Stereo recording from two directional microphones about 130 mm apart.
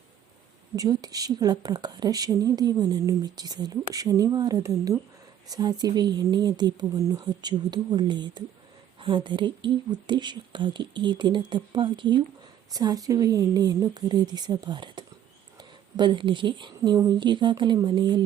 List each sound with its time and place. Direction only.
0.8 s a woman's voice: 30° right (ahead or behind)